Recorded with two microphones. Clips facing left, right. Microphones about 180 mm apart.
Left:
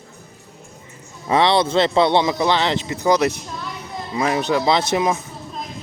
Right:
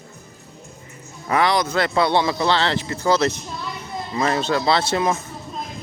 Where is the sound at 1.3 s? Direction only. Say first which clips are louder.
Left 3 dB; 25° left (ahead or behind).